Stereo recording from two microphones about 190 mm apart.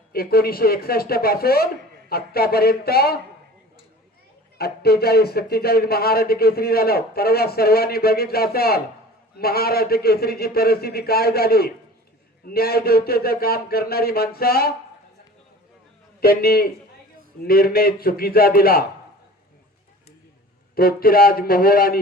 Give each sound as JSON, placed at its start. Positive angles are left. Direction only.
{"t": 0.1, "sound": "speech", "side_deg": 50}
{"t": 4.5, "sound": "speech", "side_deg": 55}
{"t": 16.2, "sound": "speech", "side_deg": 55}
{"t": 20.7, "sound": "speech", "side_deg": 50}